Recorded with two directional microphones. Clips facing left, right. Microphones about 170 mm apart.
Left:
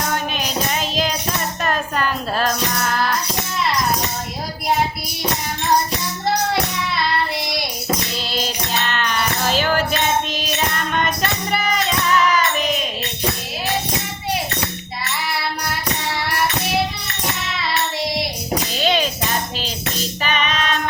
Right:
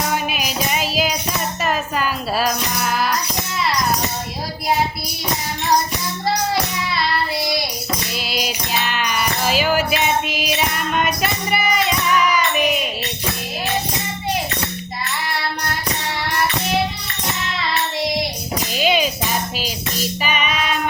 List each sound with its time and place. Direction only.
0.1 s music: 5° right (ahead or behind)
8.2 s music: 10° right (ahead or behind)
18.8 s music: 10° right (ahead or behind)